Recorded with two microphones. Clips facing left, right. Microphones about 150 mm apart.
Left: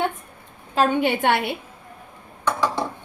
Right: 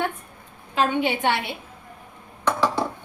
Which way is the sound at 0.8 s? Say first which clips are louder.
Left 3 dB; 55° left (ahead or behind).